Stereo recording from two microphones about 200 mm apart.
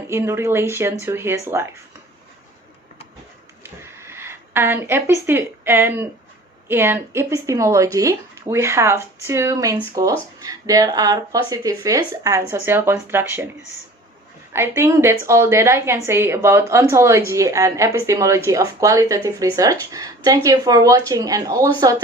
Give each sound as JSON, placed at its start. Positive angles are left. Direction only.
{"t": 0.1, "sound": "speech", "side_deg": -15}
{"t": 3.6, "sound": "a sound", "side_deg": -10}
{"t": 6.7, "sound": "speech", "side_deg": -10}
{"t": 14.5, "sound": "speech", "side_deg": -10}